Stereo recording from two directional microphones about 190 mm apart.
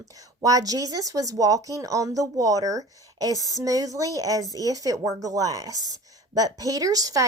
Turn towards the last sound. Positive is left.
turn(degrees=-20)  # may be behind; listen again after turning